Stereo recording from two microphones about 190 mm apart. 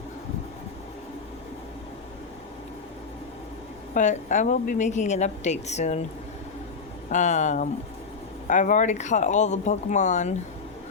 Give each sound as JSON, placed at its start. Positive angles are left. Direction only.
{"t": 3.9, "sound": "a woman's voice", "side_deg": 40}
{"t": 7.1, "sound": "a woman's voice", "side_deg": 40}